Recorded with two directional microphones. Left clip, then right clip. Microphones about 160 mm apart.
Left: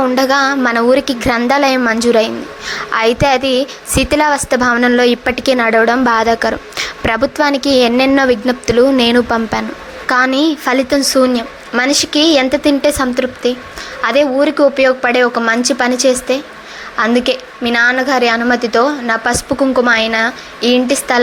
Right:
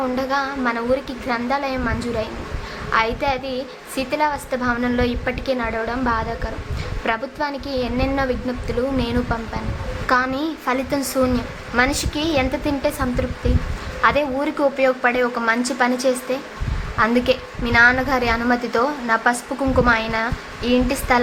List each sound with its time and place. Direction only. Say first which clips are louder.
0.0 s a woman's voice: left 10 dB; 45° left (ahead or behind)